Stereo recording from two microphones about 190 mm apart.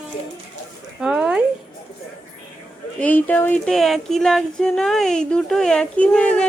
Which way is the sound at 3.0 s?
10° left (ahead or behind).